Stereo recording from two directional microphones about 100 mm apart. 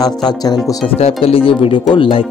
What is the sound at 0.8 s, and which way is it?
Speech, 75° left (ahead or behind).